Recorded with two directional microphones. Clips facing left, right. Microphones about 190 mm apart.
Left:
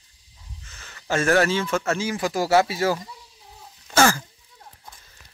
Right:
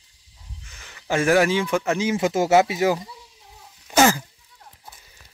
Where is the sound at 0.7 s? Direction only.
15° right (ahead or behind).